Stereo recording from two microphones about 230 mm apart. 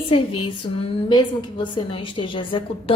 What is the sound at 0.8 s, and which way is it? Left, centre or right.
A woman's voice, centre.